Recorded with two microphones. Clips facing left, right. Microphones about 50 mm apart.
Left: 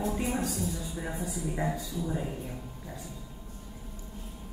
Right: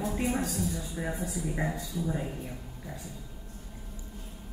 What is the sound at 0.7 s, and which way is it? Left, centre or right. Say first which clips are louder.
Speech: right 1 dB; centre.